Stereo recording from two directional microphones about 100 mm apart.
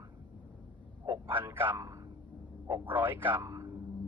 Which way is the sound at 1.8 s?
35° right (ahead or behind).